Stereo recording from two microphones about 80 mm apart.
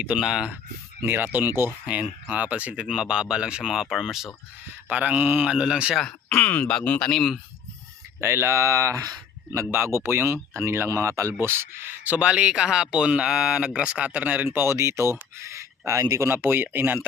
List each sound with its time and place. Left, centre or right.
0.0 s speech: centre
1.0 s speech: right
2.3 s speech: centre
4.9 s speech: right
5.5 s speech: centre
6.0 s speech: centre
7.1 s speech: centre
8.2 s speech: right
9.7 s speech: right